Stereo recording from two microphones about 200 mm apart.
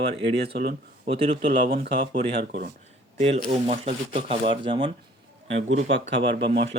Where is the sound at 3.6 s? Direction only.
30° right (ahead or behind).